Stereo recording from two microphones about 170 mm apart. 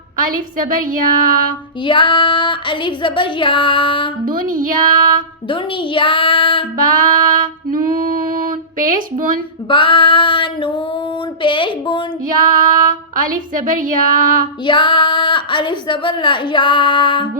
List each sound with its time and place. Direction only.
0.3 s a woman's voice: 55° right (ahead or behind)
1.8 s a woman's voice: 30° left (ahead or behind)
4.3 s a woman's voice: 55° right (ahead or behind)
5.5 s a woman's voice: 30° left (ahead or behind)
7.0 s female singing: 55° right (ahead or behind)
9.0 s a woman's voice: 55° right (ahead or behind)
9.6 s a woman's voice: 30° left (ahead or behind)
12.5 s a woman's voice: 50° right (ahead or behind)
14.7 s a woman's voice: 25° left (ahead or behind)